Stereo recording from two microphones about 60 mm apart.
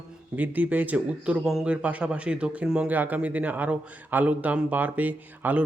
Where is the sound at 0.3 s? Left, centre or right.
Right.